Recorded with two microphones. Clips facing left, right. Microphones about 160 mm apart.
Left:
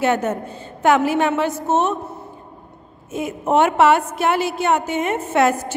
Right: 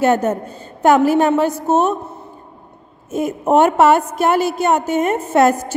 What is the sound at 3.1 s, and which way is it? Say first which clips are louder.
A woman's voice: right 4 dB; 40° right (ahead or behind).